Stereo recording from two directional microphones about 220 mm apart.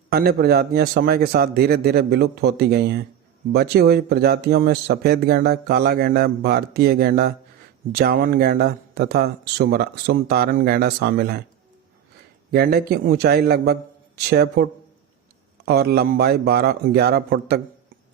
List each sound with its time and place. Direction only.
0.1 s speech: 45° right (ahead or behind)
12.5 s speech: 45° right (ahead or behind)